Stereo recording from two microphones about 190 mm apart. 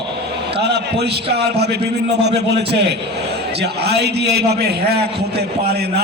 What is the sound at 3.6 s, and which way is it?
A man's voice, 60° right (ahead or behind).